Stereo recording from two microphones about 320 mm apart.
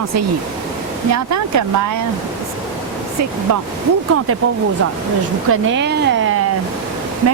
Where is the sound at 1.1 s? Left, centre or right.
Right.